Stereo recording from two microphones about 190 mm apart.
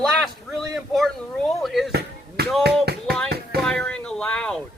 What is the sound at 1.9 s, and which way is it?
Basketball bounce, 60° right (ahead or behind).